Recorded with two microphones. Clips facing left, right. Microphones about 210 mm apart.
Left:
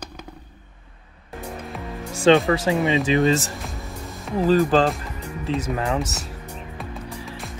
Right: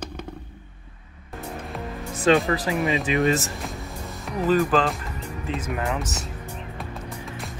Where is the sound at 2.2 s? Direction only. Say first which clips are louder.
Left 4 dB; 30° left (ahead or behind).